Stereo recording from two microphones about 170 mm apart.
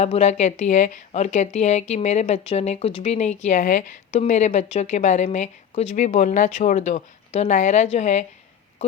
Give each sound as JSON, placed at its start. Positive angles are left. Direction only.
{"t": 0.0, "sound": "speech", "side_deg": 40}